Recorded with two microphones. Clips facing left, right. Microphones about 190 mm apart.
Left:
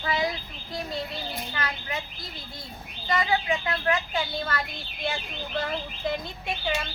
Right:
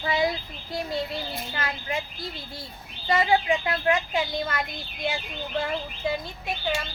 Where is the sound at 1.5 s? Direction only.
25° right (ahead or behind).